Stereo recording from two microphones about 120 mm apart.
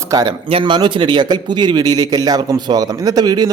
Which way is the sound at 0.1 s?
35° right (ahead or behind).